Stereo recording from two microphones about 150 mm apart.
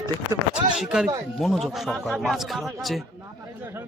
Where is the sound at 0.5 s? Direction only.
5° right (ahead or behind).